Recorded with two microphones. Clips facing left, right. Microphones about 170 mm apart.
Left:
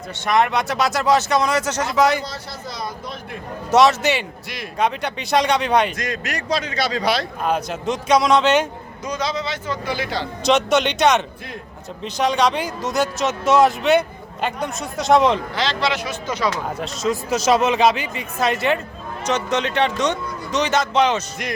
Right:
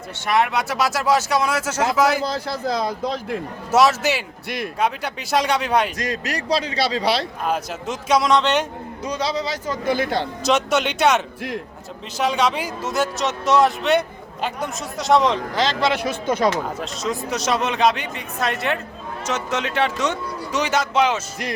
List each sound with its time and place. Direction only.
0.3 s a man's voice: 5° right (ahead or behind)
3.7 s a man's voice: 5° right (ahead or behind)
4.4 s speech: 55° right (ahead or behind)
4.8 s a man's voice: 5° right (ahead or behind)
6.0 s a man's voice: 35° right (ahead or behind)
7.4 s a man's voice: 5° right (ahead or behind)
9.0 s a man's voice: 30° right (ahead or behind); by 10.2 s 50° right (ahead or behind)
10.4 s a man's voice: 5° right (ahead or behind)
15.5 s a man's voice: 45° right (ahead or behind)
16.8 s a man's voice: centre (ahead or behind)